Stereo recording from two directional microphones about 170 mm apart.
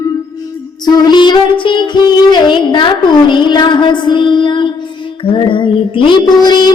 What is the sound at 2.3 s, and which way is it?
A woman's voice, 25° left (ahead or behind).